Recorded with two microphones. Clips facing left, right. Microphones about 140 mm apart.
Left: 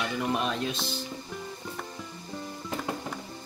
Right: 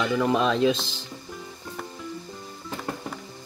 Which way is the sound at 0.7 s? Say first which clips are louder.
Right 3 dB; 90° right.